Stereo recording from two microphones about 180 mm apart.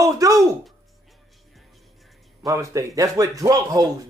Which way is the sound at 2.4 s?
15° right (ahead or behind).